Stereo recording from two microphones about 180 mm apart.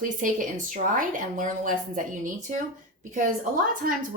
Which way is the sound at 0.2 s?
45° right (ahead or behind).